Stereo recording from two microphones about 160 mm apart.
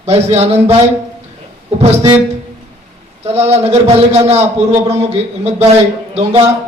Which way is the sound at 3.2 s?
40° right (ahead or behind).